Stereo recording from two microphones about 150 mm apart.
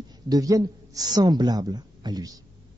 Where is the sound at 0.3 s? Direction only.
25° right (ahead or behind).